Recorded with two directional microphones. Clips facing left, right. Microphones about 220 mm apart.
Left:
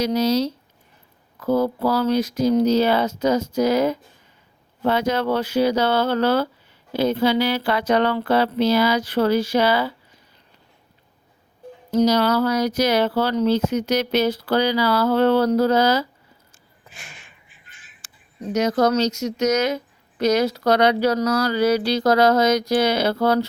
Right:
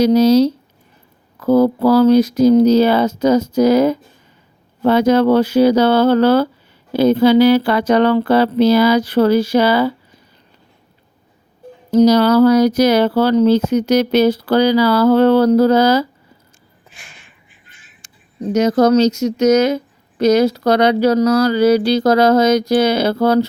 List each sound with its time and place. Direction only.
0.0 s speech: 35° right (ahead or behind)
1.4 s speech: 70° right (ahead or behind)
1.9 s speech: 35° right (ahead or behind)
11.9 s speech: 35° right (ahead or behind)
18.5 s a woman's voice: 30° right (ahead or behind)